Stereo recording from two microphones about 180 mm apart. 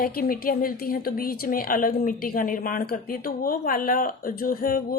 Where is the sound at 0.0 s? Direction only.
55° left (ahead or behind).